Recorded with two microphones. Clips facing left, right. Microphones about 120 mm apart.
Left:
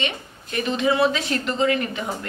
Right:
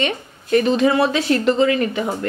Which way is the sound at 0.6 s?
40° right (ahead or behind).